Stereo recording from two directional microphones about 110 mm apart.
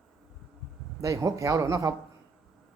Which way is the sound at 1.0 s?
30° right (ahead or behind).